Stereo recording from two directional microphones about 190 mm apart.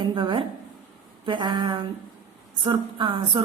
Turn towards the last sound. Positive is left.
turn(degrees=-25)  # may be behind; listen again after turning